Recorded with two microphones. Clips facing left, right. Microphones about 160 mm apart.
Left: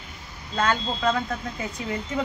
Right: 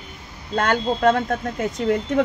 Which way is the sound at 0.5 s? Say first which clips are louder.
Right 4 dB; 55° right (ahead or behind).